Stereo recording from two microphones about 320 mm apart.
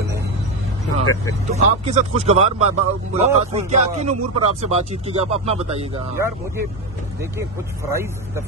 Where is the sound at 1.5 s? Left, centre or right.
Right.